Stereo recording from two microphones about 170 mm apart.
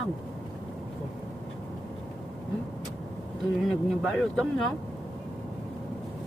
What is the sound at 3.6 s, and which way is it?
Speech, 5° left (ahead or behind).